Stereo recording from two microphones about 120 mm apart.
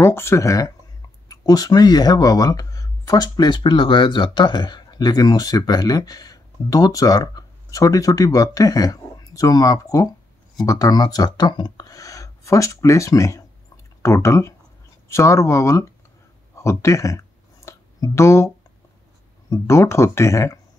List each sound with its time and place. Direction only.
0.0 s speech: 20° left (ahead or behind)
16.5 s a sound: 25° left (ahead or behind)
19.5 s speech: 25° left (ahead or behind)